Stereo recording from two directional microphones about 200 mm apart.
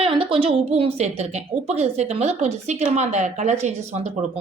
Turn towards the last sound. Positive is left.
turn(degrees=-35)  # may be behind; listen again after turning